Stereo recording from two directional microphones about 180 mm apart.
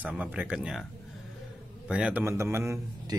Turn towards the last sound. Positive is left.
turn(degrees=-15)  # may be behind; listen again after turning